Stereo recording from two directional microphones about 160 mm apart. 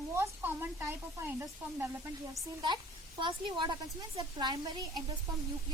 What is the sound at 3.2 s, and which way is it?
A woman's voice, 30° right (ahead or behind).